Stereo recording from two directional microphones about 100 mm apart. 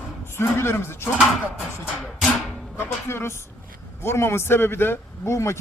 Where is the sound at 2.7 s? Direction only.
25° left (ahead or behind).